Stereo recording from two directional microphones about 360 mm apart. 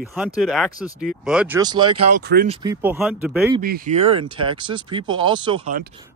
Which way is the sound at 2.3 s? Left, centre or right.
Right.